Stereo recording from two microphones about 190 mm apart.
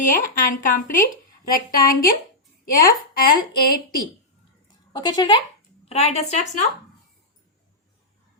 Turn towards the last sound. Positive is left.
turn(degrees=35)  # may be behind; listen again after turning